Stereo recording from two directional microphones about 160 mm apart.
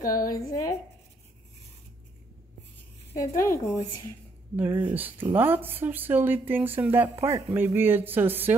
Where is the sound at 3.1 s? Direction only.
20° left (ahead or behind).